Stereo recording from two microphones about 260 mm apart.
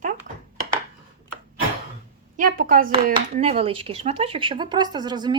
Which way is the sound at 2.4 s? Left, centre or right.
Right.